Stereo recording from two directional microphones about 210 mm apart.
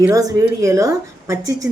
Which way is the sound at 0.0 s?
15° right (ahead or behind).